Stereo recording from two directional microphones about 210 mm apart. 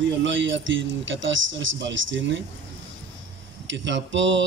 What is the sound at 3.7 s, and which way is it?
Speech, 60° right (ahead or behind).